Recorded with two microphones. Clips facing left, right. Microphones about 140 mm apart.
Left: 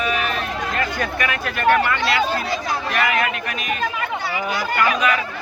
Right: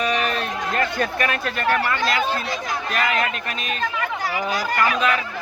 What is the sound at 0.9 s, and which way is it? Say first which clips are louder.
Speech: right 1 dB; 30° right (ahead or behind).